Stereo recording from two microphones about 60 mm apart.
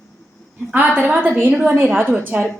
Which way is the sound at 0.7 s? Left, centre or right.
Right.